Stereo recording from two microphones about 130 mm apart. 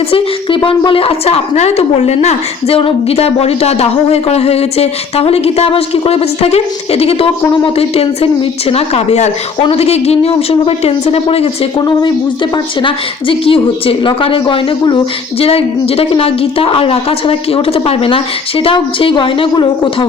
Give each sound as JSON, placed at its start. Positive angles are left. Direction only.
{"t": 0.1, "sound": "a woman's voice", "side_deg": 45}
{"t": 9.6, "sound": "a woman's voice", "side_deg": 45}